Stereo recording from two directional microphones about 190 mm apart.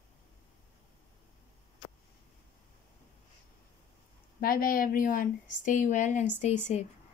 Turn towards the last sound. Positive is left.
turn(degrees=35)  # may be behind; listen again after turning